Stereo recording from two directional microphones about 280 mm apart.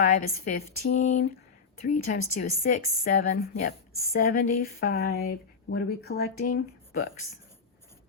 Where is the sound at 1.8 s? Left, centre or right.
Left.